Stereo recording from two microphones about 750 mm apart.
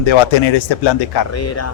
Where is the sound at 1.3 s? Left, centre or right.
Centre.